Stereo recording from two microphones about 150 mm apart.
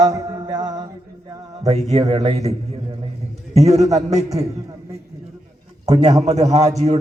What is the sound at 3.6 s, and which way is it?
Speech, 50° right (ahead or behind).